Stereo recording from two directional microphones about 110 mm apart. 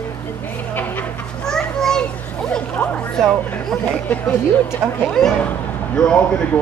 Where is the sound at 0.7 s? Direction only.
15° left (ahead or behind).